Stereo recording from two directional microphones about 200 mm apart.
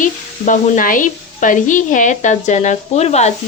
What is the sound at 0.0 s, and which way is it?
Sizzle, 40° left (ahead or behind).